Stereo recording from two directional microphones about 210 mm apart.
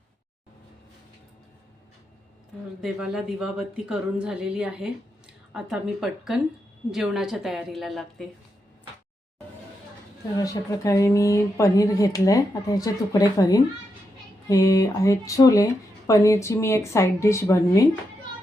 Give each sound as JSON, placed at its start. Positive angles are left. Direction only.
{"t": 2.8, "sound": "a woman's voice", "side_deg": -5}
{"t": 10.3, "sound": "speech", "side_deg": 15}